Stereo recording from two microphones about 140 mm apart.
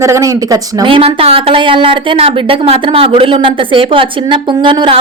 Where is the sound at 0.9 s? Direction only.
40° right (ahead or behind).